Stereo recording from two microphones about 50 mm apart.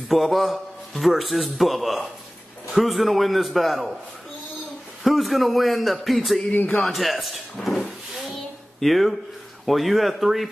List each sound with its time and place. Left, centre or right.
0.1 s a man's voice: centre
5.0 s a man's voice: centre
6.5 s speech: left
6.9 s a man's voice: centre